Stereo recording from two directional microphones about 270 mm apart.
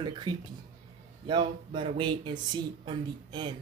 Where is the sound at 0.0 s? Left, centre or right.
Centre.